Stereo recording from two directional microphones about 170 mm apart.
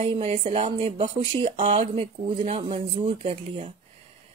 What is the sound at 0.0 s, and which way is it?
Speech, 35° right (ahead or behind).